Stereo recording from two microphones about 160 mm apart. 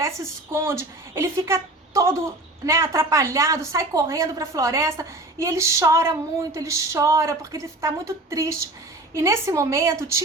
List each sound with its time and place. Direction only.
0.5 s a woman's voice: 15° right (ahead or behind)